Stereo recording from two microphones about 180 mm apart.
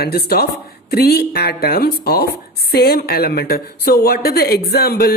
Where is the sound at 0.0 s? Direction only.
60° left (ahead or behind).